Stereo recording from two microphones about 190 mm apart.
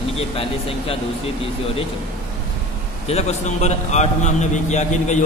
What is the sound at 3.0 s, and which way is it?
A man's voice, 35° left (ahead or behind).